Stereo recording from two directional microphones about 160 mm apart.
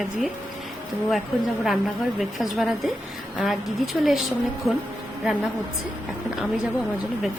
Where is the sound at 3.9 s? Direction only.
Centre (ahead or behind).